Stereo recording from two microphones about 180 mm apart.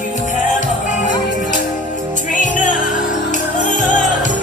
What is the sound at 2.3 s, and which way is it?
Music, 45° left (ahead or behind).